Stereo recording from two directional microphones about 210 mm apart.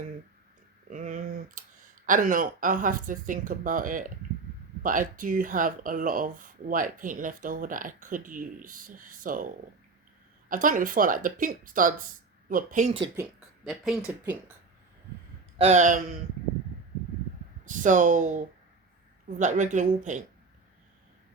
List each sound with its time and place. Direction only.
0.9 s speech: 35° right (ahead or behind)
13.7 s speech: centre (ahead or behind)
15.5 s speech: 30° right (ahead or behind)
17.7 s speech: 35° right (ahead or behind)